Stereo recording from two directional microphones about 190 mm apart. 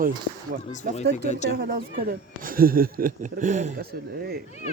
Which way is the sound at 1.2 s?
40° left (ahead or behind).